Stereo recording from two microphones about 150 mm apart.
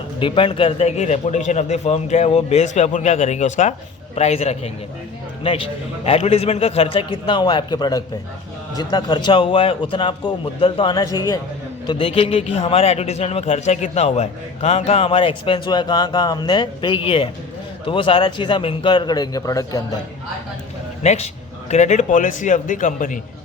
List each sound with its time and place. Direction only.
0.2 s a man's voice: 35° left (ahead or behind)
6.1 s a man's voice: 45° left (ahead or behind); by 20.0 s 20° left (ahead or behind)
21.0 s a man's voice: 45° left (ahead or behind)